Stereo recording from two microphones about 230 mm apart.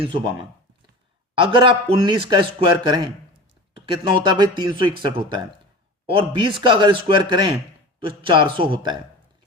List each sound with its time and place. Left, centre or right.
1.4 s a man's voice: right